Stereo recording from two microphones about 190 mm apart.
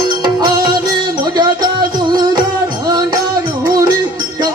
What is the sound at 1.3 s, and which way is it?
Music, 20° right (ahead or behind).